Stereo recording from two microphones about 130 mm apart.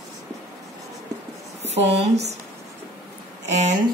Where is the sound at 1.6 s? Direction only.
55° right (ahead or behind).